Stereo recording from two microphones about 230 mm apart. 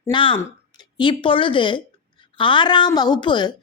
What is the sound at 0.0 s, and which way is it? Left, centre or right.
A woman's voice, left.